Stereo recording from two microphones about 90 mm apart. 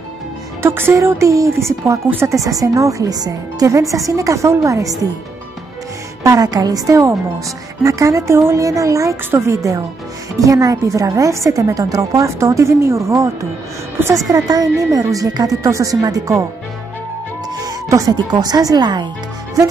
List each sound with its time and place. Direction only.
0.6 s a woman's voice: 25° right (ahead or behind)
6.2 s a woman's voice: 45° right (ahead or behind)
14.0 s a woman's voice: 25° right (ahead or behind)
14.3 s a woman's voice: 45° right (ahead or behind)
17.6 s music: 40° right (ahead or behind)
18.1 s speech: 50° right (ahead or behind)